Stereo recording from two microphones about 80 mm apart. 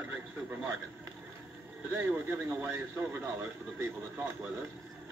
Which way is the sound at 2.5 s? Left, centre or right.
Right.